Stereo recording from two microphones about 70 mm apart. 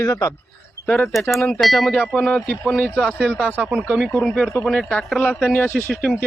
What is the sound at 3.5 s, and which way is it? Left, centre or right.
Speech, centre.